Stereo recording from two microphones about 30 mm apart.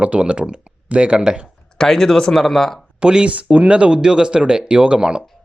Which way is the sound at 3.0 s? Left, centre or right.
Right.